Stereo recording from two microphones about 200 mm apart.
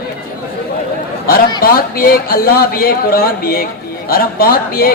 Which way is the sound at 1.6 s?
50° left (ahead or behind).